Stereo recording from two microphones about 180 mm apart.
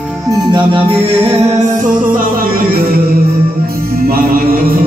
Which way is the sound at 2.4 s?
55° right (ahead or behind).